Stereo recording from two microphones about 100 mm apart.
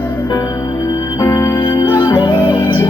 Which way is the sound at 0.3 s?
40° left (ahead or behind).